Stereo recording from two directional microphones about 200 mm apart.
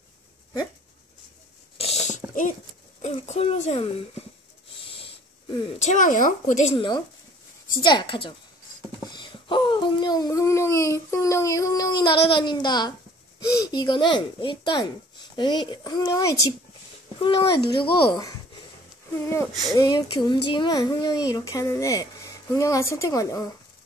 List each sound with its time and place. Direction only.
1.8 s mechanisms: 30° left (ahead or behind)
3.0 s a woman's voice: 35° left (ahead or behind)
5.8 s a woman's voice: 40° left (ahead or behind)
7.8 s speech: 20° left (ahead or behind)